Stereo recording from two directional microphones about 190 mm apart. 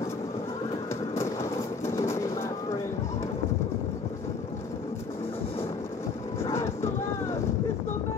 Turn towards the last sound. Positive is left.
turn(degrees=15)  # may be behind; listen again after turning